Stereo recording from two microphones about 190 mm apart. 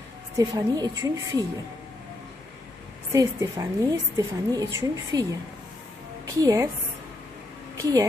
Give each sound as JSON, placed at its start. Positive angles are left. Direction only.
{"t": 0.4, "sound": "speech", "side_deg": -20}
{"t": 3.1, "sound": "a woman's voice", "side_deg": -15}
{"t": 7.7, "sound": "speech", "side_deg": -15}